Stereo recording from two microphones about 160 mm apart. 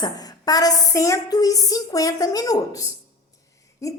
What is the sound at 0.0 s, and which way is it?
A woman's voice, 25° left (ahead or behind).